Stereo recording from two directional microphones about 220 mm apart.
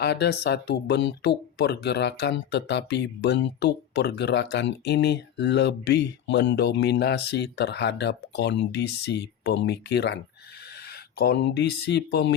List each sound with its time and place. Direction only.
0.0 s speech: 50° left (ahead or behind)
11.2 s speech: 45° left (ahead or behind)